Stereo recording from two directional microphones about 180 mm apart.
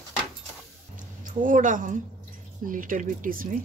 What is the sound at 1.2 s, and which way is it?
A woman's voice, 50° right (ahead or behind).